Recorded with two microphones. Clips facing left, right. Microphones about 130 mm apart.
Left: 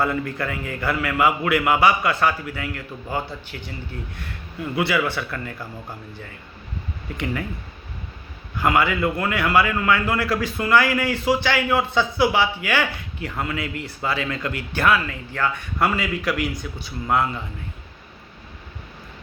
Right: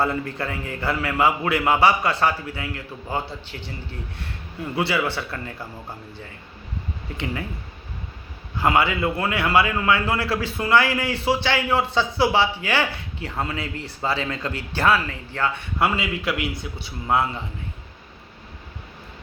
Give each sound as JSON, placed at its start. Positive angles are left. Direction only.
{"t": 0.0, "sound": "a man's voice", "side_deg": -30}
{"t": 8.6, "sound": "a man's voice", "side_deg": -25}